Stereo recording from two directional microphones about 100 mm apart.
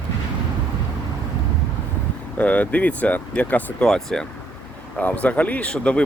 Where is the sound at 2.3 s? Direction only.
15° left (ahead or behind).